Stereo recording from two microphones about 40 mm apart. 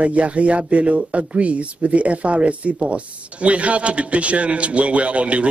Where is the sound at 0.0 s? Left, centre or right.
Right.